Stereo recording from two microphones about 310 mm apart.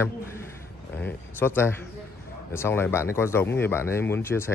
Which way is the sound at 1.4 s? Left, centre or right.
Centre.